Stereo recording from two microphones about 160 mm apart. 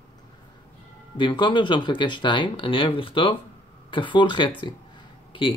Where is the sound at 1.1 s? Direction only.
30° left (ahead or behind).